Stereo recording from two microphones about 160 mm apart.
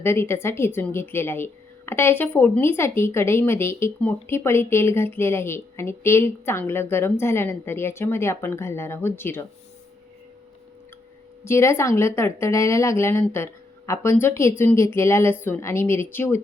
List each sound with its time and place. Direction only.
0.0 s speech: 15° left (ahead or behind)
11.4 s speech: 15° left (ahead or behind)